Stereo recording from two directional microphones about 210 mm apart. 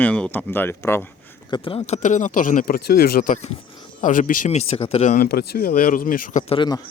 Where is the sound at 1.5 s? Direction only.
25° left (ahead or behind); by 6.4 s 40° left (ahead or behind).